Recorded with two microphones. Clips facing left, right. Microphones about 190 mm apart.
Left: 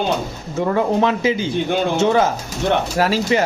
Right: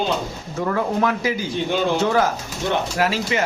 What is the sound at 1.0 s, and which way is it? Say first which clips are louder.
Speech: left 4 dB; 25° left (ahead or behind).